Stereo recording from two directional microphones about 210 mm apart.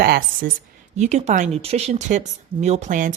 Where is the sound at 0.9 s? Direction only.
30° right (ahead or behind).